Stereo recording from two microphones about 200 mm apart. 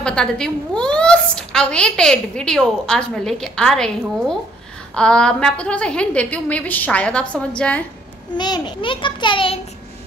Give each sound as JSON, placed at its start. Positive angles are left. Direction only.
{"t": 0.0, "sound": "a woman's voice", "side_deg": 5}
{"t": 8.4, "sound": "a child's voice", "side_deg": 20}